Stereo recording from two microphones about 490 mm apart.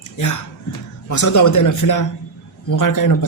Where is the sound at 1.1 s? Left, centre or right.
Left.